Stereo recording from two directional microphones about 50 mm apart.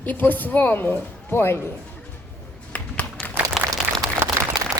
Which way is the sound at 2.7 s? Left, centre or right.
Left.